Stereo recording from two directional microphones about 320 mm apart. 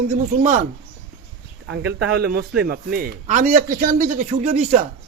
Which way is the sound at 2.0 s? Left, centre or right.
Right.